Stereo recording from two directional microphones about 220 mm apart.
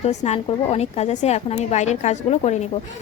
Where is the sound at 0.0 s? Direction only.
30° left (ahead or behind).